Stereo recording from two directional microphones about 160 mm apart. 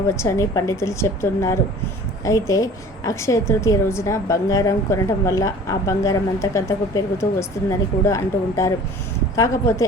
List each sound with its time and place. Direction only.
0.1 s a woman's voice: 20° left (ahead or behind)